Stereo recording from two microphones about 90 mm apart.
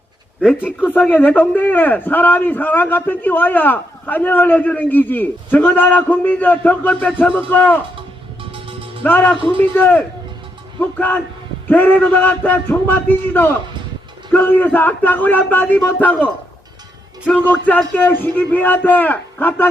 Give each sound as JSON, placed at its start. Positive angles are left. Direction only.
{"t": 0.9, "sound": "a man's voice", "side_deg": 20}
{"t": 8.4, "sound": "music", "side_deg": -90}
{"t": 9.0, "sound": "a man's voice", "side_deg": 20}